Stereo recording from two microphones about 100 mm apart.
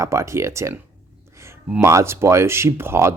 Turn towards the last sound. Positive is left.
turn(degrees=-25)  # may be behind; listen again after turning